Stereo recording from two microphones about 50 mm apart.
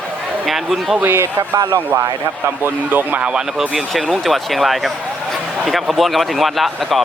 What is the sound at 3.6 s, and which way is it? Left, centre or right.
Speech, centre.